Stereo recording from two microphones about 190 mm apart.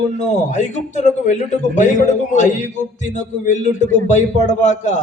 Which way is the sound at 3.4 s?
40° left (ahead or behind).